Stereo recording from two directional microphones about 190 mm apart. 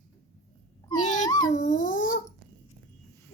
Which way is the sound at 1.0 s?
40° left (ahead or behind).